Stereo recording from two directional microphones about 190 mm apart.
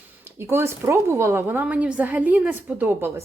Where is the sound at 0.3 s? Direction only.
15° right (ahead or behind).